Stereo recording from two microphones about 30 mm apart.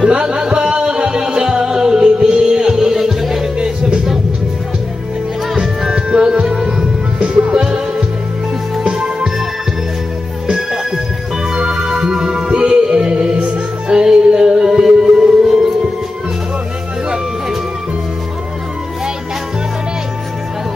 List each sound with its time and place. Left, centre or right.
0.1 s music: right
0.4 s a sound: right
0.7 s music: right; by 3.4 s centre
6.1 s music: right
8.8 s music: right
11.5 s music: right